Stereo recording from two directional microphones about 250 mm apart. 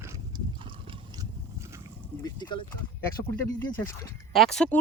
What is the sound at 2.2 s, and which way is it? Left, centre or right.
A man's voice, centre.